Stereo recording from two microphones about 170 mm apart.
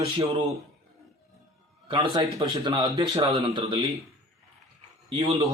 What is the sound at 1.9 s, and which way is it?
Speech, 25° right (ahead or behind).